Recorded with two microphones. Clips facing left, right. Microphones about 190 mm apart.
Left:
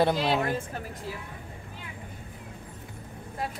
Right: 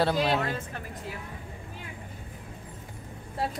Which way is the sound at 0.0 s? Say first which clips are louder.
Left 1 dB; 15° left (ahead or behind).